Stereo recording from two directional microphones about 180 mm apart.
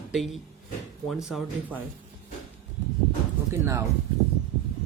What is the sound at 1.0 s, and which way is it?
Speech, centre (ahead or behind).